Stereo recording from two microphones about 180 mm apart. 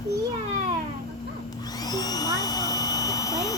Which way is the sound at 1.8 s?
20° left (ahead or behind).